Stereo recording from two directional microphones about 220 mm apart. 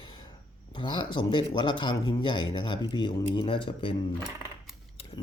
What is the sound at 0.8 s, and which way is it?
Speech, 20° left (ahead or behind).